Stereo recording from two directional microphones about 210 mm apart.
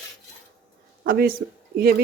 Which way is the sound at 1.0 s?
45° right (ahead or behind).